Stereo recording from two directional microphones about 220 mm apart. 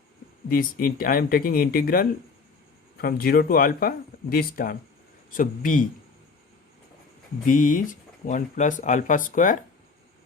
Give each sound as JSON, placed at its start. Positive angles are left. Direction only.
{"t": 0.5, "sound": "speech", "side_deg": 40}
{"t": 7.4, "sound": "speech", "side_deg": 35}